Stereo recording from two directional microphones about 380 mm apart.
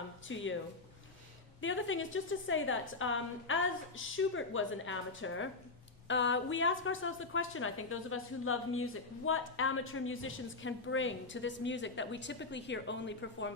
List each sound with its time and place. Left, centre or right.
0.3 s speech: left
1.6 s a woman's voice: left